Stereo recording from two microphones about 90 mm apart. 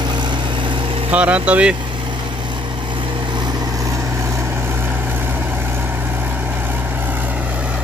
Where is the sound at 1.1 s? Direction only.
15° right (ahead or behind).